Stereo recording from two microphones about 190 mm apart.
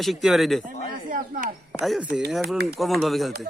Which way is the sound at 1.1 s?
45° right (ahead or behind).